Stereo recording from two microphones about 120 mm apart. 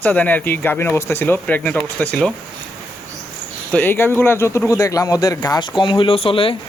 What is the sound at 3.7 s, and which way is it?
Speech, 15° left (ahead or behind).